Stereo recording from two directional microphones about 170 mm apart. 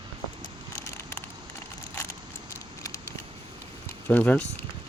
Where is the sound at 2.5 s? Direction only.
20° left (ahead or behind).